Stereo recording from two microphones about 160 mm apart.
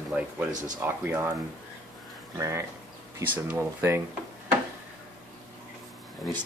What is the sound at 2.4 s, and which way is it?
Speech, 20° right (ahead or behind).